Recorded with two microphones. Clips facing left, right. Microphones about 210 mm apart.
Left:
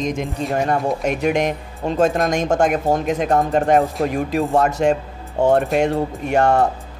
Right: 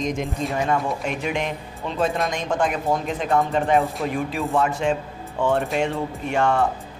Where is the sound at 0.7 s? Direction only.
45° left (ahead or behind).